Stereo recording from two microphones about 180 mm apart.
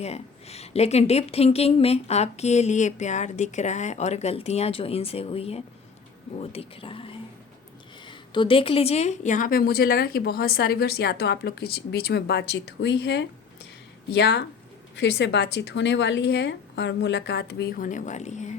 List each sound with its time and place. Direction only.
0.0 s a woman's voice: 35° left (ahead or behind)